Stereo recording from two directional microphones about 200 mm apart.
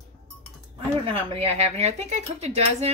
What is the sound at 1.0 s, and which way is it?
A woman's voice, 25° right (ahead or behind).